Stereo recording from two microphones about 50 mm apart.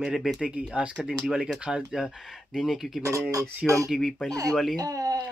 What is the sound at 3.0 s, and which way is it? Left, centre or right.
Speech, right.